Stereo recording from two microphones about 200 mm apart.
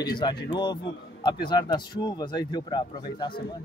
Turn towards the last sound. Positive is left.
turn(degrees=25)  # may be behind; listen again after turning